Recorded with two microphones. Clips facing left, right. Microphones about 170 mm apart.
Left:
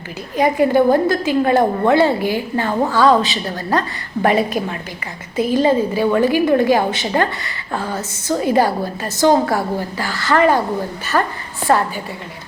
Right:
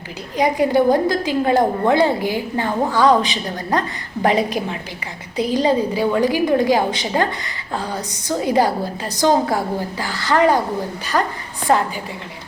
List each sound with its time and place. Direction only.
0.3 s a woman's voice: 15° right (ahead or behind)